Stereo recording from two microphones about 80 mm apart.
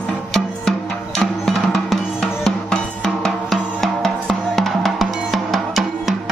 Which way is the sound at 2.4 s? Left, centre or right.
Centre.